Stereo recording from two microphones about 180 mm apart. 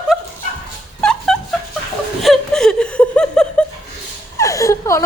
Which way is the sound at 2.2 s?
Centre (ahead or behind).